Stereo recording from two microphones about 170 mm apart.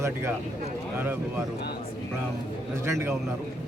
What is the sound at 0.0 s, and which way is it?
Speech, 15° right (ahead or behind).